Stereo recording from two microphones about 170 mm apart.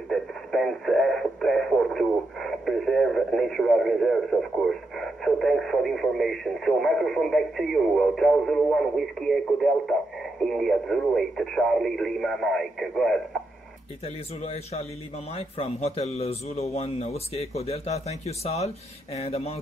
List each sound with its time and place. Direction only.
0.1 s radio: centre (ahead or behind)
10.4 s speech: centre (ahead or behind)
14.0 s a man's voice: 35° left (ahead or behind)